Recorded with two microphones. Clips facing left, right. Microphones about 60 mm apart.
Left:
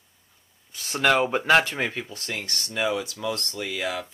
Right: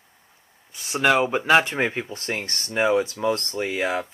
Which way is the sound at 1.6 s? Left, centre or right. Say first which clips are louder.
Right 4 dB; right.